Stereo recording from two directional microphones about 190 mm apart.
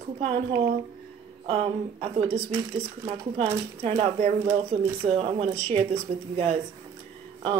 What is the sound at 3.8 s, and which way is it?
Speech, 30° right (ahead or behind).